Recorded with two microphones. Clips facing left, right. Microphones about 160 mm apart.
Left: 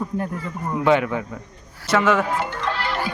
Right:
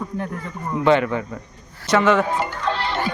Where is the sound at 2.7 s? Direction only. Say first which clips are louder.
Right 3 dB; 25° right (ahead or behind).